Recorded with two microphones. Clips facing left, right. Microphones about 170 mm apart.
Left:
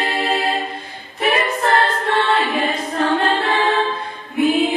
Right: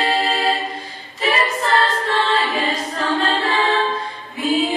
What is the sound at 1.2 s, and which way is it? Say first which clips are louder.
A capella: left 2 dB; 55° left (ahead or behind).